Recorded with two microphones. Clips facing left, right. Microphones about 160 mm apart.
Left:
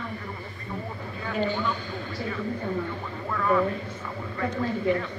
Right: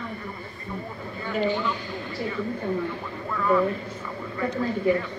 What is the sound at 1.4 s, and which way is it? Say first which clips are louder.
A man's voice: right 3 dB; 10° right (ahead or behind).